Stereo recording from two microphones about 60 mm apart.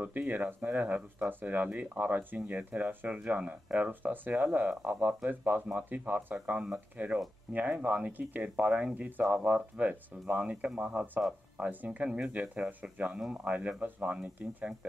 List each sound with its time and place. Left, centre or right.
0.0 s speech: right